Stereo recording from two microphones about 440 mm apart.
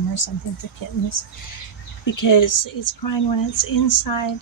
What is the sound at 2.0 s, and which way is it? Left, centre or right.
Speech, left.